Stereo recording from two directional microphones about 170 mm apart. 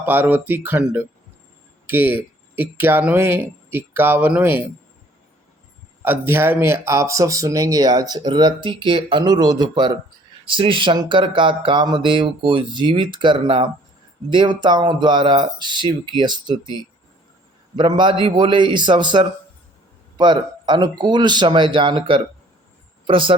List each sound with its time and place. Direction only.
0.0 s speech: 10° right (ahead or behind)
6.0 s speech: 10° right (ahead or behind); by 23.3 s 30° right (ahead or behind)